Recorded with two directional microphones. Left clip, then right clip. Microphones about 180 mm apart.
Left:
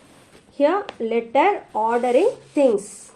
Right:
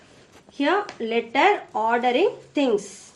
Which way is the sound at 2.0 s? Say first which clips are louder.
Left 3 dB; 40° left (ahead or behind).